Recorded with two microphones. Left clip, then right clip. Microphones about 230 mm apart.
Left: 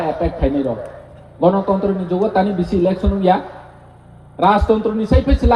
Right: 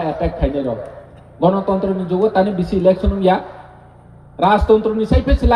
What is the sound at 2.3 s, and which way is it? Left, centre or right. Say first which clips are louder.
A man's voice: right 1 dB; right.